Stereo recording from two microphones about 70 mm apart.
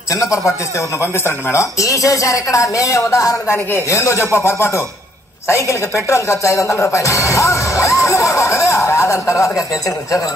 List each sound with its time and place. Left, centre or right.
0.1 s speech: left
1.1 s speech: left